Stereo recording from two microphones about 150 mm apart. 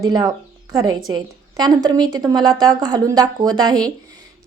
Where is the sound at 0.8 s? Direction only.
25° right (ahead or behind).